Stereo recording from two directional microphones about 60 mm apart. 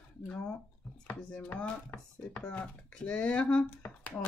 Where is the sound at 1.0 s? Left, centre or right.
Left.